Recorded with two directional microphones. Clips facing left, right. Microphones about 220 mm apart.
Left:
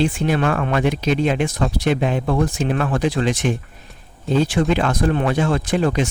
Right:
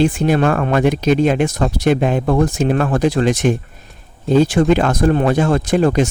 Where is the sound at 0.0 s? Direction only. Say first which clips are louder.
Right 4 dB; 45° right (ahead or behind).